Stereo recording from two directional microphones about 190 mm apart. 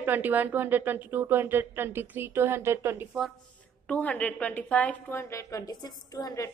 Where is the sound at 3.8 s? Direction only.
5° left (ahead or behind).